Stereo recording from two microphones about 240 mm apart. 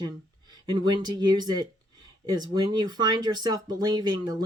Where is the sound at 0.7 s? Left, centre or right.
Centre.